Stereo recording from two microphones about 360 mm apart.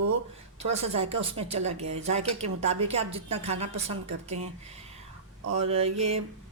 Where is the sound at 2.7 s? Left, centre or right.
Centre.